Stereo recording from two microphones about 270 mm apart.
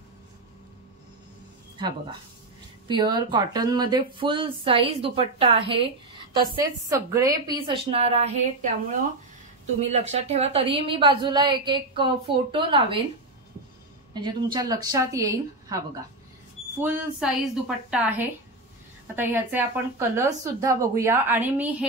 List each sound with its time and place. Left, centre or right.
2.9 s speech: centre
9.8 s speech: right
14.1 s a woman's voice: centre